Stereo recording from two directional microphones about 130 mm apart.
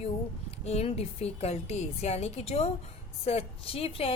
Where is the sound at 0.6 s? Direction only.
55° left (ahead or behind).